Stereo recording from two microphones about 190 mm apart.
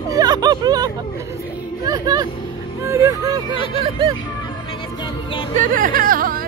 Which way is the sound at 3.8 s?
25° right (ahead or behind).